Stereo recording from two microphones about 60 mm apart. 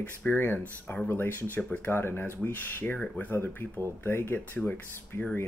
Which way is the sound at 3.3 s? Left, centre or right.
Left.